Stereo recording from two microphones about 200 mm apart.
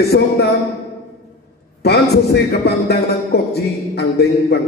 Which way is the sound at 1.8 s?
55° left (ahead or behind).